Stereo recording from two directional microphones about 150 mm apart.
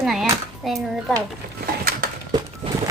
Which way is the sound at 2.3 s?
30° right (ahead or behind).